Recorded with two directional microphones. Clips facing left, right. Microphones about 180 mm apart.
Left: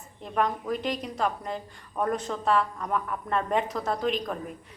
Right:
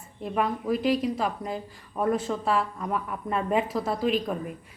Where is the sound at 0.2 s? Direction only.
5° right (ahead or behind).